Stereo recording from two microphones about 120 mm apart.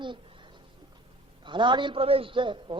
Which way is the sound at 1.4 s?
40° right (ahead or behind).